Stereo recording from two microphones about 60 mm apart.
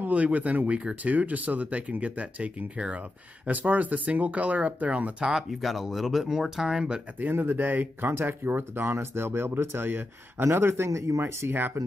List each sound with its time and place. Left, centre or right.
0.0 s speech: right
5.2 s speech: centre
7.2 s speech: right